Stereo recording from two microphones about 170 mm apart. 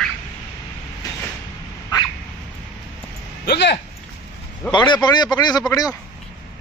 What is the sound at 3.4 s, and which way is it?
Speech, 85° left.